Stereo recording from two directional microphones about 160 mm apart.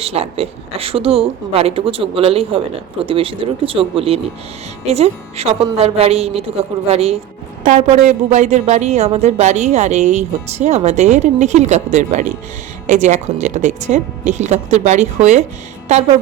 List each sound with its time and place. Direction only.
0.0 s a woman's voice: 40° right (ahead or behind)